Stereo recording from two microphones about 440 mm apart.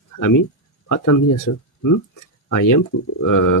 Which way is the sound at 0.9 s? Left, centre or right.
Left.